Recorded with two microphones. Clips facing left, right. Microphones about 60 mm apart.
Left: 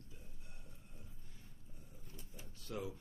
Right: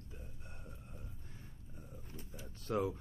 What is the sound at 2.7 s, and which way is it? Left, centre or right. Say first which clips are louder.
Speech: right 9 dB; right.